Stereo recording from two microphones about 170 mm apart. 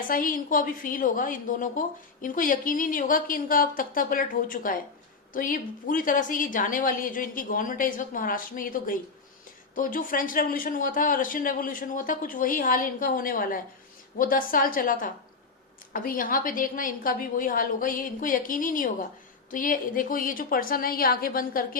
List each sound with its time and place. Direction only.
0.1 s a woman's voice: 55° left (ahead or behind)